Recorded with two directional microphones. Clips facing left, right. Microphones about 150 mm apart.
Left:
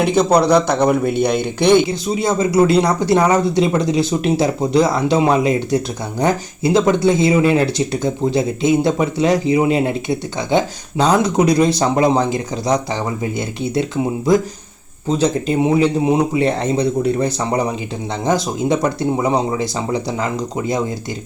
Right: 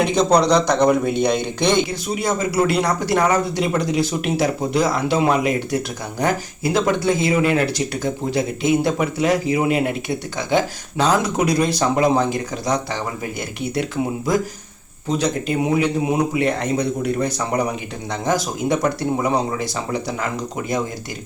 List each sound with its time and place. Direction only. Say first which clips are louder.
0.0 s speech: left 2 dB; 5° left (ahead or behind)
1.9 s speech: left 4 dB; 25° left (ahead or behind)